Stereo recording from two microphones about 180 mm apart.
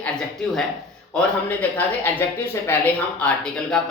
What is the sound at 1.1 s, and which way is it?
A man's voice, 10° left (ahead or behind).